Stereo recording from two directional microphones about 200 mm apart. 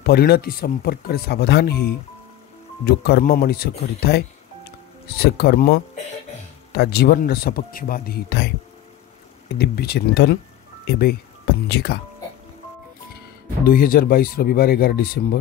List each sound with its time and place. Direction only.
0.0 s speech: 50° left (ahead or behind)
9.6 s speech: 55° left (ahead or behind)
13.7 s speech: 45° left (ahead or behind)